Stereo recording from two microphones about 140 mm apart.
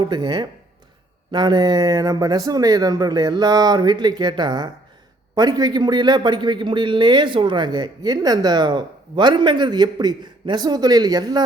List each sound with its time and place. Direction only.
0.0 s a man's voice: 35° right (ahead or behind)